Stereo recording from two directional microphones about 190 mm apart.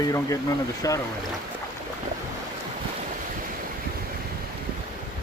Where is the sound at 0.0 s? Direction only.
15° left (ahead or behind).